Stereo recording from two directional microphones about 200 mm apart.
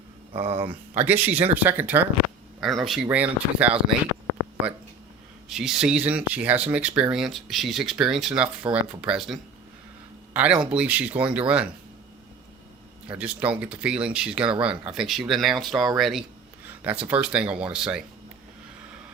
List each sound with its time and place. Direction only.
0.3 s speech: 30° right (ahead or behind)
1.0 s speech: 10° right (ahead or behind)
5.5 s speech: centre (ahead or behind)
13.1 s speech: 5° right (ahead or behind)